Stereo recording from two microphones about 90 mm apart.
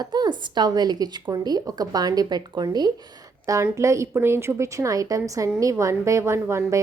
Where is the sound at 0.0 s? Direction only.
50° right (ahead or behind).